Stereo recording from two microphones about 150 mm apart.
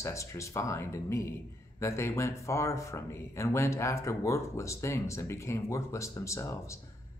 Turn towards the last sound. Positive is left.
turn(degrees=20)  # may be behind; listen again after turning